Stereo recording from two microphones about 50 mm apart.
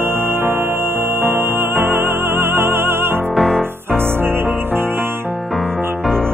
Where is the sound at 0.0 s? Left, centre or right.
Right.